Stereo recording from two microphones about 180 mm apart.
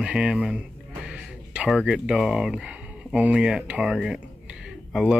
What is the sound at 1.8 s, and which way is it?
Speech, centre (ahead or behind).